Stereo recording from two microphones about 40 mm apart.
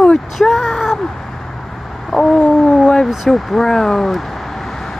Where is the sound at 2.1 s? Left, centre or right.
Centre.